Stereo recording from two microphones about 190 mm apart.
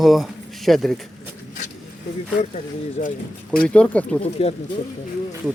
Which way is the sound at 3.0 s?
35° left (ahead or behind).